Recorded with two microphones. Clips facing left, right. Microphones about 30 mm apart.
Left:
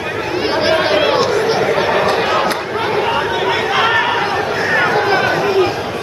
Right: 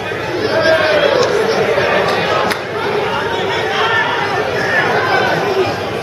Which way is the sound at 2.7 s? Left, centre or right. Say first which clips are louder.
Left 2 dB; centre.